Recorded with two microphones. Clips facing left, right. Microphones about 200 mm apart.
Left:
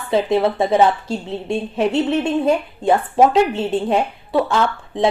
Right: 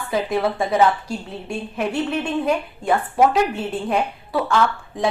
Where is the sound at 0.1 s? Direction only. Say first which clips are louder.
Left 5 dB; 25° left (ahead or behind).